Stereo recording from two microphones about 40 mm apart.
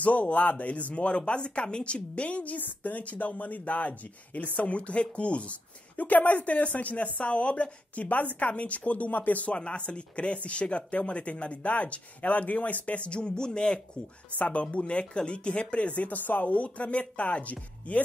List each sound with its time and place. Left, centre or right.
0.0 s speech: left
14.4 s speech: left